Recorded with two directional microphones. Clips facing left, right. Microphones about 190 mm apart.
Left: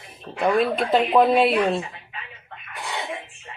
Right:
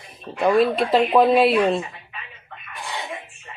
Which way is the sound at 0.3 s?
Centre (ahead or behind).